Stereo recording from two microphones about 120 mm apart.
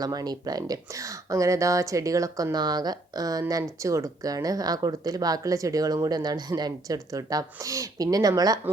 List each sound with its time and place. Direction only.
0.0 s speech: 30° right (ahead or behind)